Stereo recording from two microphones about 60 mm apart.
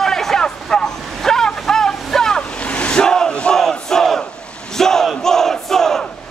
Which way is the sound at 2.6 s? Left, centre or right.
Left.